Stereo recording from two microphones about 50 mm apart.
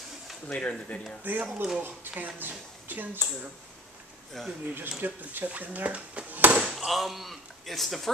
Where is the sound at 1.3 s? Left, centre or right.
Right.